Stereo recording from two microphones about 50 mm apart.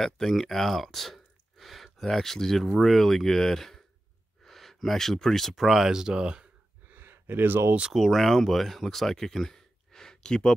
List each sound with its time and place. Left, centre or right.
0.0 s speech: centre
6.9 s a sound: right
7.9 s speech: centre